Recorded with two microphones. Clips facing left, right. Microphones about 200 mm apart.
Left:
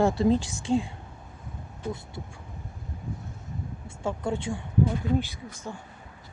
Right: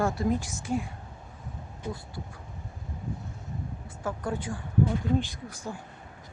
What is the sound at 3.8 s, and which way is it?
Speech, 25° left (ahead or behind).